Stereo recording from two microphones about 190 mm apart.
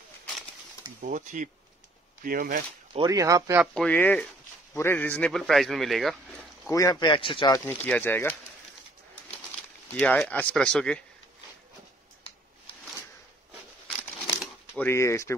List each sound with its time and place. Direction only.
1.0 s speech: 40° right (ahead or behind)
2.9 s speech: 20° right (ahead or behind)
3.7 s a man's voice: 5° left (ahead or behind)
6.6 s speech: 20° left (ahead or behind)
9.9 s a man's voice: 5° left (ahead or behind)
14.8 s speech: 15° left (ahead or behind)